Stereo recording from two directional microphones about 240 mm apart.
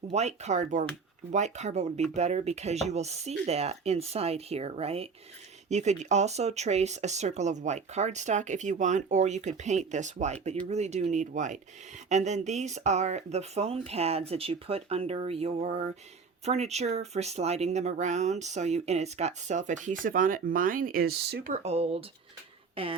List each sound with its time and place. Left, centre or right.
0.1 s speech: right